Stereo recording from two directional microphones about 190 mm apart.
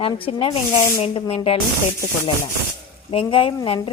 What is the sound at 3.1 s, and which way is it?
Speech, 30° left (ahead or behind).